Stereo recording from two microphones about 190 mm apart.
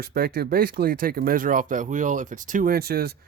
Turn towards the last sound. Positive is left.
turn(degrees=-55)  # may be behind; listen again after turning